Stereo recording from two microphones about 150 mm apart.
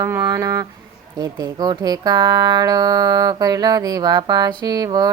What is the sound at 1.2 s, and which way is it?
Speech, 25° right (ahead or behind).